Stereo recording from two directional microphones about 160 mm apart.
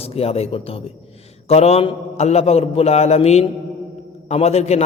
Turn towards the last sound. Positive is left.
turn(degrees=45)  # may be behind; listen again after turning